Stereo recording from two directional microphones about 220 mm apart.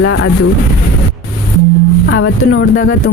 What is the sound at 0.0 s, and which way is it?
Speech, 65° left (ahead or behind).